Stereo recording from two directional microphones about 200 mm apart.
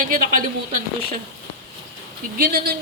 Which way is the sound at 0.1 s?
45° right (ahead or behind).